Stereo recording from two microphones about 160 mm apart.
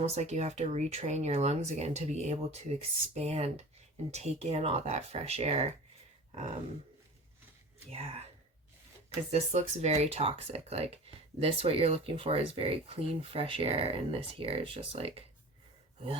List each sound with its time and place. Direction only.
0.0 s speech: 45° right (ahead or behind)
7.9 s speech: 40° right (ahead or behind)